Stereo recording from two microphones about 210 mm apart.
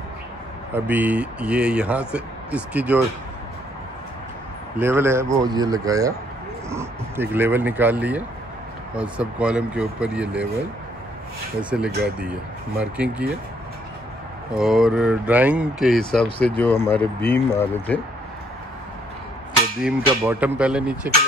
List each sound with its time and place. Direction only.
0.7 s speech: 10° right (ahead or behind)
4.7 s speech: 10° right (ahead or behind)
11.7 s speech: 5° right (ahead or behind)
14.6 s speech: centre (ahead or behind)
19.8 s speech: 5° right (ahead or behind)